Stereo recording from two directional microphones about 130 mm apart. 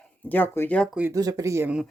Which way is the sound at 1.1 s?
30° right (ahead or behind).